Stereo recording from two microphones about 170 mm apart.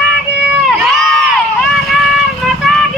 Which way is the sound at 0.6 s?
Centre (ahead or behind).